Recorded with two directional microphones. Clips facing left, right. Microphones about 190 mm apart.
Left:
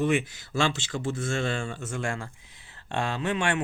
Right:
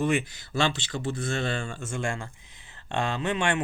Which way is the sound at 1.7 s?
5° left (ahead or behind).